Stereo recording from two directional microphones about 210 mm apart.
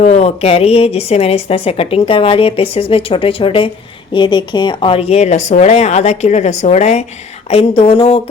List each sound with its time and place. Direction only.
0.0 s a woman's voice: 30° left (ahead or behind)